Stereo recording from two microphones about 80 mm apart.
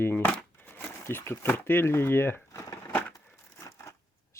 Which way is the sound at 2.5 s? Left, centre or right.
Left.